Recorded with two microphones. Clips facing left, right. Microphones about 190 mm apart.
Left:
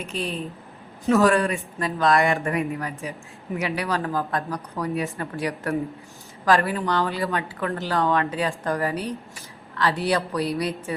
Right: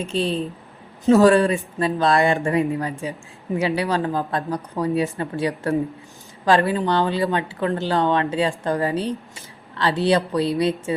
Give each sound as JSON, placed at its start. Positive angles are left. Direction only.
{"t": 0.1, "sound": "a man's voice", "side_deg": -30}